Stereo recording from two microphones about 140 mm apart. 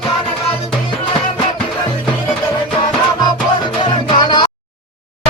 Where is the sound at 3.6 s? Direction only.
35° left (ahead or behind).